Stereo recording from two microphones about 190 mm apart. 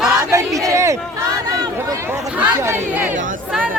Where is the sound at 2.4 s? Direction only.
10° right (ahead or behind).